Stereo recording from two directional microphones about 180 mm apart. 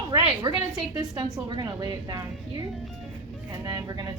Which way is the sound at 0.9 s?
25° right (ahead or behind).